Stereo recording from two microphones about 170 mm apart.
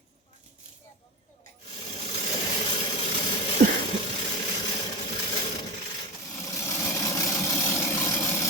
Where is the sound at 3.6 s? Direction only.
55° right (ahead or behind).